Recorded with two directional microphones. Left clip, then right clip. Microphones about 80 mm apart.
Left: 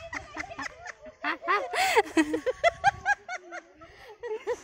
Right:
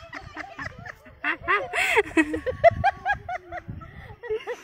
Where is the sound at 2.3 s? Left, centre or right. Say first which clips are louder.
Right 6 dB; left.